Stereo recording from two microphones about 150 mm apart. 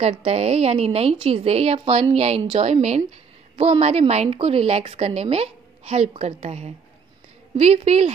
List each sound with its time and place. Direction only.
0.0 s a woman's voice: 45° right (ahead or behind)